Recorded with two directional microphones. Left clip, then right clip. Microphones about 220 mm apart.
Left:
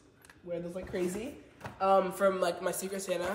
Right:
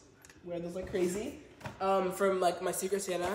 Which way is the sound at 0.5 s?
5° left (ahead or behind).